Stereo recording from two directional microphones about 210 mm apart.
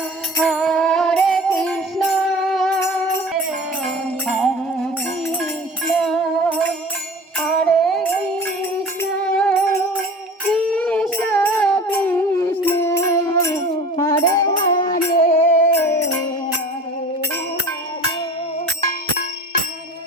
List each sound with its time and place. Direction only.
0.3 s music: centre (ahead or behind)
6.0 s music: centre (ahead or behind); by 14.8 s 25° left (ahead or behind)
15.1 s music: 35° left (ahead or behind)